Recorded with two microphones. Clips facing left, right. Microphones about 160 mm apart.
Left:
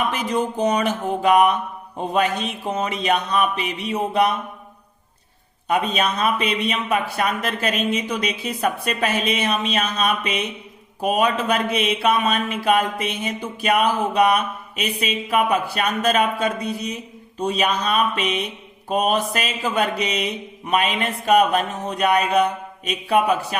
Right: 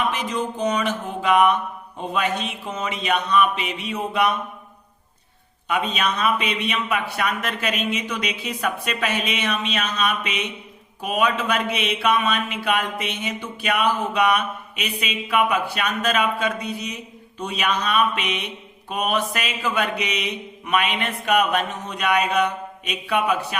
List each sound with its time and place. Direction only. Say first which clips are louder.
0.1 s a sound: left 3 dB; 45° left (ahead or behind)
2.7 s speech: left 2 dB; 40° left (ahead or behind)
5.9 s speech: left 1 dB; 35° left (ahead or behind)